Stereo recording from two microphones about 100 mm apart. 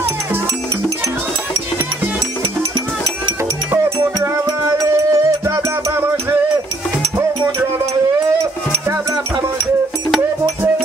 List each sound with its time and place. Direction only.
3.7 s music: 25° right (ahead or behind)